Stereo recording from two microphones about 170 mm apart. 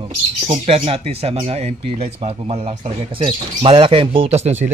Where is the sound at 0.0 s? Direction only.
30° right (ahead or behind).